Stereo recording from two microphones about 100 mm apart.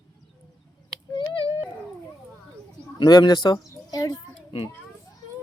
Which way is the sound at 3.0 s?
45° left (ahead or behind).